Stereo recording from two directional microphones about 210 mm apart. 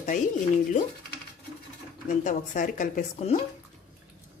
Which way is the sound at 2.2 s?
40° left (ahead or behind).